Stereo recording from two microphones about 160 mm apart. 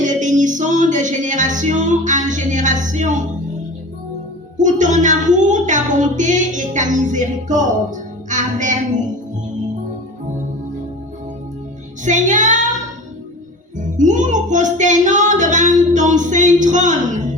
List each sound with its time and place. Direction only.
0.0 s music: 50° right (ahead or behind)
4.5 s speech: 50° right (ahead or behind)
12.0 s child singing: 50° right (ahead or behind)
13.9 s music: 50° right (ahead or behind)